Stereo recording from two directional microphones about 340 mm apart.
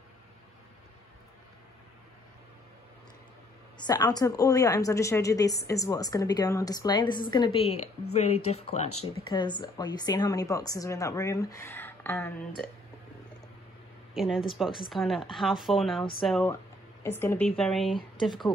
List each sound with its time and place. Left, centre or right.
3.7 s a woman's voice: centre
14.1 s speech: centre